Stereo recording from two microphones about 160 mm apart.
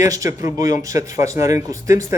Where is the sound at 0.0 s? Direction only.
20° right (ahead or behind).